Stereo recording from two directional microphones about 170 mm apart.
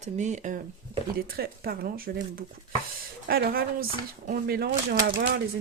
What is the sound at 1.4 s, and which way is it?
Speech, 60° right (ahead or behind).